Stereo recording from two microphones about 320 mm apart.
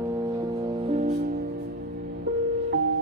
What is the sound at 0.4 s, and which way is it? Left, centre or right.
Music, centre.